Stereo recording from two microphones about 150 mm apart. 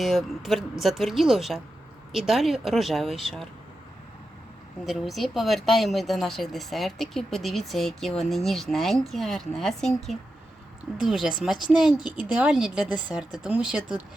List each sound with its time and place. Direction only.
0.0 s speech: centre (ahead or behind)
4.9 s speech: centre (ahead or behind)